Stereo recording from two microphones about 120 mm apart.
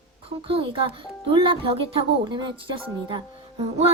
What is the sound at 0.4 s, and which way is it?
Speech, 50° right (ahead or behind).